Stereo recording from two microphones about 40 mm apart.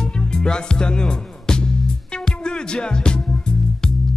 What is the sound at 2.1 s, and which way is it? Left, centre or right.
Music, left.